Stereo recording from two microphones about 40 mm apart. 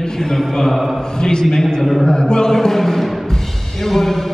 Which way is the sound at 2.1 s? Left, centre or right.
Centre.